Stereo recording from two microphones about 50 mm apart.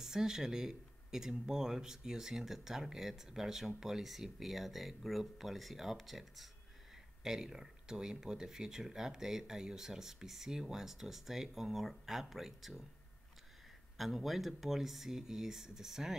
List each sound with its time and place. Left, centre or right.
0.0 s speech: centre
13.9 s speech: centre